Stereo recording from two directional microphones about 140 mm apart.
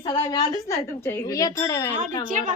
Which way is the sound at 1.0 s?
20° left (ahead or behind).